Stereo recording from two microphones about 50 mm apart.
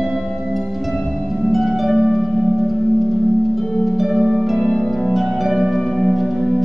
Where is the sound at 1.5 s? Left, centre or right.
Centre.